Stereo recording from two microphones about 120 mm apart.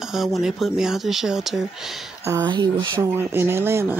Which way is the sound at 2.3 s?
35° right (ahead or behind).